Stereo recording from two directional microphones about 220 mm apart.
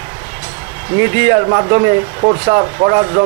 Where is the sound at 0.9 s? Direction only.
15° right (ahead or behind).